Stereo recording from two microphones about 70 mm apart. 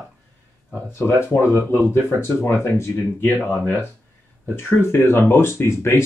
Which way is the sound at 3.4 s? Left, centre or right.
Left.